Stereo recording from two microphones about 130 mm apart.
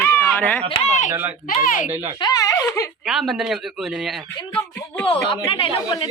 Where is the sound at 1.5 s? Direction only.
90° left.